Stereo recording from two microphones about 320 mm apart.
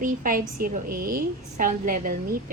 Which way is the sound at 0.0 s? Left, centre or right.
Right.